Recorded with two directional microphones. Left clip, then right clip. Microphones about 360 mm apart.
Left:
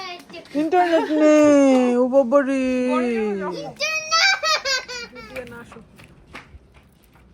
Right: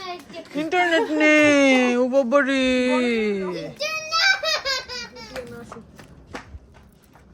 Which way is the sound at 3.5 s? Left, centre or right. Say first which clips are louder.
Left 3 dB; left.